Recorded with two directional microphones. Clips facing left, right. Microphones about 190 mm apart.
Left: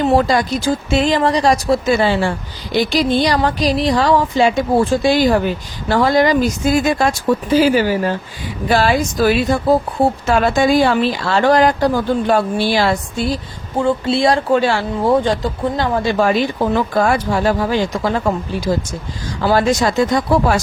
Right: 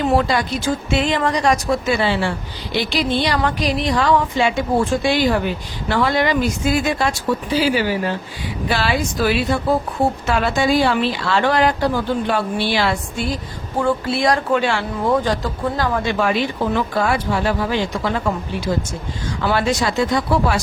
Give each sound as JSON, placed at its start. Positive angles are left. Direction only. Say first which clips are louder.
{"t": 0.2, "sound": "speech", "louder": "left 4 dB", "side_deg": 40}
{"t": 13.8, "sound": "speech", "louder": "left 3 dB", "side_deg": 25}
{"t": 16.0, "sound": "speech", "louder": "left 4 dB", "side_deg": 40}
{"t": 19.4, "sound": "speech", "louder": "left 5 dB", "side_deg": 40}